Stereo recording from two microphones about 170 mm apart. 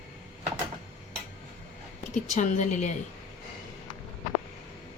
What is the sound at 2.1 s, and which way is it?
Speech, 45° left (ahead or behind).